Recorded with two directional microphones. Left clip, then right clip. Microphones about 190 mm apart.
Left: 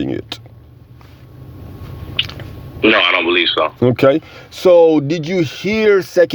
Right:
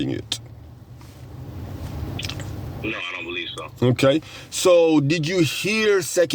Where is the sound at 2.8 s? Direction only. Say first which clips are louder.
Left 17 dB; 45° left (ahead or behind).